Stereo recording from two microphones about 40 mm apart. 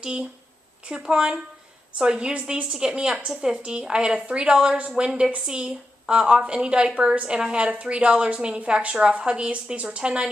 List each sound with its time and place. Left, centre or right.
0.0 s a woman's voice: centre